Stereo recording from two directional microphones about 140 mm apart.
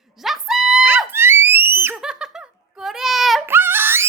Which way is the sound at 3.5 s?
15° right (ahead or behind).